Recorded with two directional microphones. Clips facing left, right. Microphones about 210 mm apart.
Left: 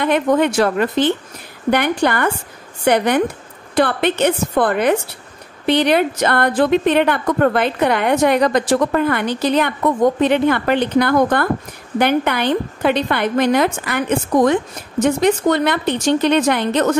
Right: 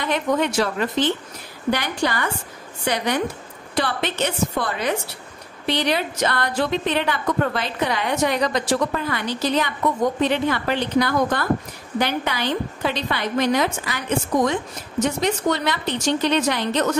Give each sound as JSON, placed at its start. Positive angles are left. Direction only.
{"t": 0.0, "sound": "a woman's voice", "side_deg": 55}